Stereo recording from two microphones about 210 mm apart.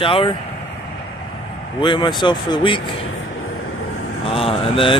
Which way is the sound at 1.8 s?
25° left (ahead or behind).